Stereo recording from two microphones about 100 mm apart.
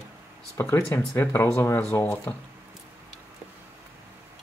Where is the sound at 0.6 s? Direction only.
25° left (ahead or behind).